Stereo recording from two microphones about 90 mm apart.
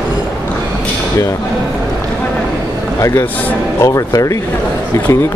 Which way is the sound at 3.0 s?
35° left (ahead or behind).